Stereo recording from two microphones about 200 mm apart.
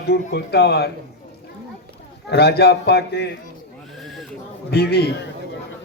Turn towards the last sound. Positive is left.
turn(degrees=55)  # may be behind; listen again after turning